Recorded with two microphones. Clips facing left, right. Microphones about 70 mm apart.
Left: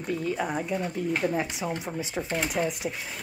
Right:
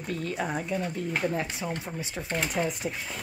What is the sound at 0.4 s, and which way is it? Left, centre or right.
Speech, centre.